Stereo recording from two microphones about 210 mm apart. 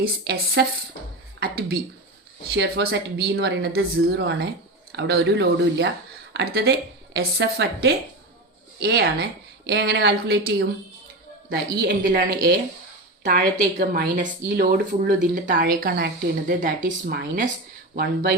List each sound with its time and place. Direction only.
0.0 s speech: 50° right (ahead or behind)
11.8 s a woman's voice: 50° right (ahead or behind)